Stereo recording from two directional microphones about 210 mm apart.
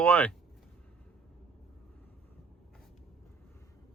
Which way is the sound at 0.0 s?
5° left (ahead or behind).